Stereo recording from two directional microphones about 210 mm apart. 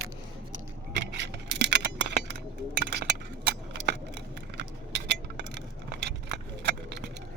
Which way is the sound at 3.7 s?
55° right (ahead or behind).